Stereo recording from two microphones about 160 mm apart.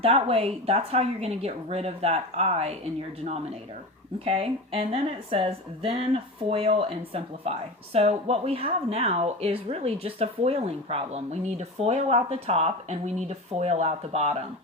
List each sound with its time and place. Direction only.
0.0 s speech: 35° right (ahead or behind)
4.3 s speech: 35° right (ahead or behind)